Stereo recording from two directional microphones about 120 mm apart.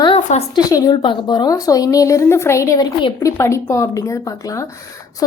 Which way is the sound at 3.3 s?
20° left (ahead or behind).